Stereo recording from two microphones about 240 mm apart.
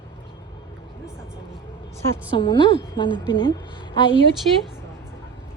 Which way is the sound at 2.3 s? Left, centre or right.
Centre.